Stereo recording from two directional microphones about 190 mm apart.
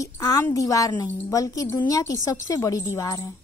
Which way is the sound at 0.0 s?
20° left (ahead or behind).